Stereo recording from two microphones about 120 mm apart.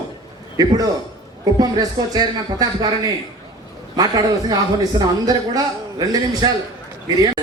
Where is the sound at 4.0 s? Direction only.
35° right (ahead or behind).